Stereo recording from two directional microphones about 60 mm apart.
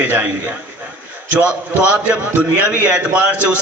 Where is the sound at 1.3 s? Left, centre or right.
Right.